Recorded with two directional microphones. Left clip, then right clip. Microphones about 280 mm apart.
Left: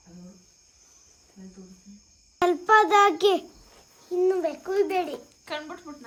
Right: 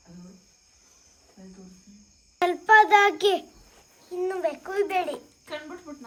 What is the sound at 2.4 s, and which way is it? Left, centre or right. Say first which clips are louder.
Child singing: right 2 dB; centre.